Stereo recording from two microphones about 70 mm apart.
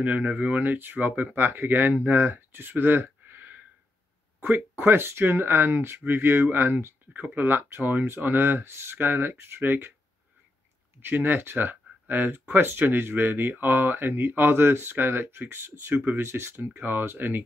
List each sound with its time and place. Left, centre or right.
0.0 s speech: right
11.1 s speech: right